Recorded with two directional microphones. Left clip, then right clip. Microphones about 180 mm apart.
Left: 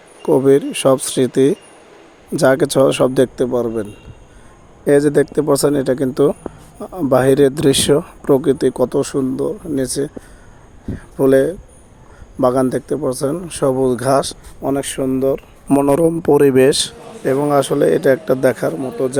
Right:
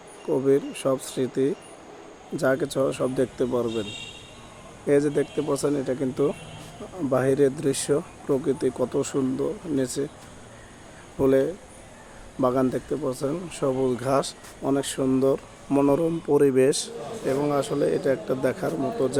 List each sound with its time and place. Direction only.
0.3 s speech: 55° left (ahead or behind); by 3.8 s 35° left (ahead or behind)
4.9 s speech: 50° left (ahead or behind)
11.2 s speech: 40° left (ahead or behind)
14.7 s speech: 35° left (ahead or behind)
15.1 s speech: 20° left (ahead or behind)
15.7 s speech: 55° left (ahead or behind)